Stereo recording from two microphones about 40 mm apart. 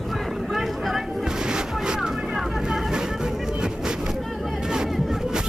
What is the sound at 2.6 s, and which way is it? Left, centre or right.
Vehicle, centre.